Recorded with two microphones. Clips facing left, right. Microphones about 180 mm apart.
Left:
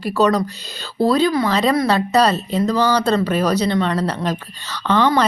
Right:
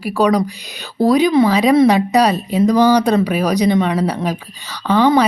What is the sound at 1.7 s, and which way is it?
Speech, 25° right (ahead or behind).